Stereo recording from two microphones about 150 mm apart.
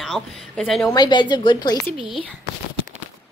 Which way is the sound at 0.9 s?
30° left (ahead or behind).